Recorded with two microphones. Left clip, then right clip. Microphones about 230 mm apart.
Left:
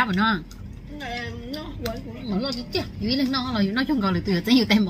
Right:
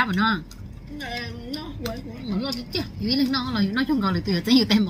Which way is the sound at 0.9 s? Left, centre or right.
Right.